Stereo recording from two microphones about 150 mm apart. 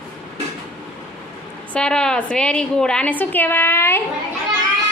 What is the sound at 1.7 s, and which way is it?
A woman's voice, 5° left (ahead or behind).